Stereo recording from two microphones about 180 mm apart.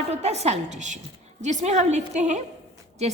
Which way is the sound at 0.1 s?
35° right (ahead or behind).